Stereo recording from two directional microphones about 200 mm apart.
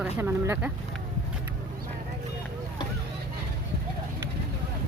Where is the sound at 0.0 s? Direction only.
10° right (ahead or behind).